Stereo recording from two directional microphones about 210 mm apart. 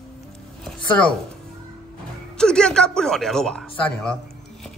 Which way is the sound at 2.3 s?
5° left (ahead or behind).